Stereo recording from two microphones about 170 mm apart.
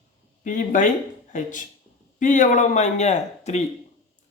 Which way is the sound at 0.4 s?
50° left (ahead or behind).